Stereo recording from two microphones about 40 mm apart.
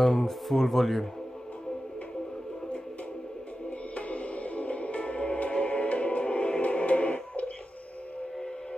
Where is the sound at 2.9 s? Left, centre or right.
Left.